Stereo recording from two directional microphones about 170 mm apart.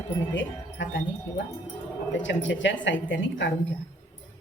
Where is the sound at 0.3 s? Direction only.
90° left.